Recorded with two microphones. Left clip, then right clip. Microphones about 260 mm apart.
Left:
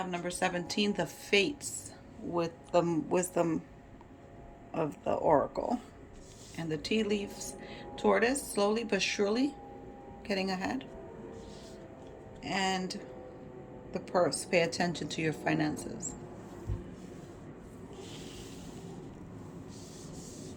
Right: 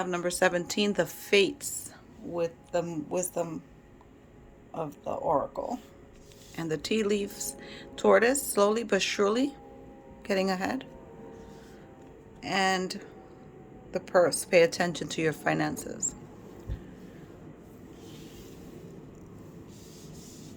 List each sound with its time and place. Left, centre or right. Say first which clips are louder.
0.0 s a woman's voice: right 7 dB; centre
2.3 s a man's voice: even; centre
5.0 s a man's voice: left 1 dB; centre
6.6 s a woman's voice: right 3 dB; centre
12.4 s a woman's voice: right 5 dB; centre